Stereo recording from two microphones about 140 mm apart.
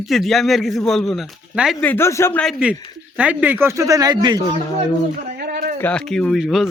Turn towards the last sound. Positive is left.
turn(degrees=0)  # may be behind; listen again after turning